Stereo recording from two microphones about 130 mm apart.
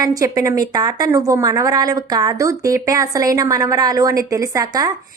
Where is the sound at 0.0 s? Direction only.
30° right (ahead or behind).